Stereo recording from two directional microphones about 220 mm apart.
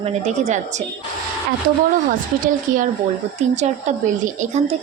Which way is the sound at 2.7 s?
40° right (ahead or behind).